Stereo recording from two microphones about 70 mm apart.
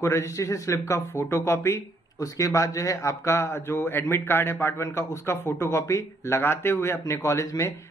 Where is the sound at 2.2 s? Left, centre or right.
Left.